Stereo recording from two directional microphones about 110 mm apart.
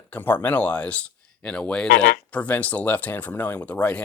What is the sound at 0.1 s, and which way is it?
Speech, 15° left (ahead or behind).